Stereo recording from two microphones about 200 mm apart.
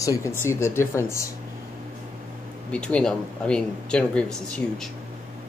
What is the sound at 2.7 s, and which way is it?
Speech, 5° left (ahead or behind).